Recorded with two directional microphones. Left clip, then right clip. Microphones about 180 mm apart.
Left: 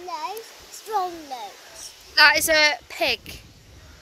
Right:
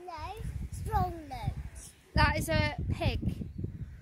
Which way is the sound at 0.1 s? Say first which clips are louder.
Left 12 dB; 15° right (ahead or behind).